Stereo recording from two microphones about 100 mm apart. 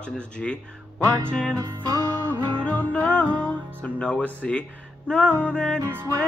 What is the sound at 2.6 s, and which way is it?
Music, 15° left (ahead or behind).